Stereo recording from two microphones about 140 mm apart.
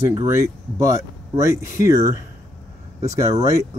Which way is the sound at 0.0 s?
20° right (ahead or behind).